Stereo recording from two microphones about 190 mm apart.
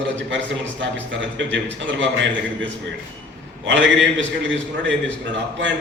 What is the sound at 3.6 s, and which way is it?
A man's voice, 70° right (ahead or behind).